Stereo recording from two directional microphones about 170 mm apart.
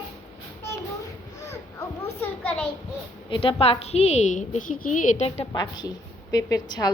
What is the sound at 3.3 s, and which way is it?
A woman's voice, 30° left (ahead or behind).